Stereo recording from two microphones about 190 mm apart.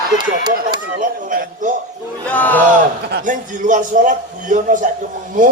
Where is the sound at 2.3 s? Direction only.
10° left (ahead or behind).